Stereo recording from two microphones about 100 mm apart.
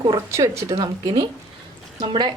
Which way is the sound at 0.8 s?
40° right (ahead or behind).